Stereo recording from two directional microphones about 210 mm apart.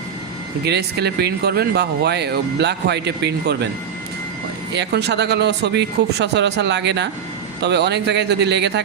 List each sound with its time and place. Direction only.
0.6 s speech: 50° right (ahead or behind)
4.7 s speech: 55° right (ahead or behind)